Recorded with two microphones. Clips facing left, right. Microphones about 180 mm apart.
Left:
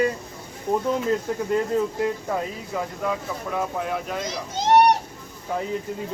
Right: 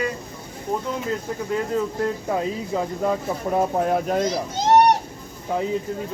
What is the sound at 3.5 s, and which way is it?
Speech, 35° right (ahead or behind).